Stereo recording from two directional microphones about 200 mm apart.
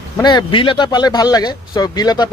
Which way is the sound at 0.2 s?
20° left (ahead or behind).